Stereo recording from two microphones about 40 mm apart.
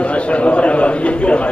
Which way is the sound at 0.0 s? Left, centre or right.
Left.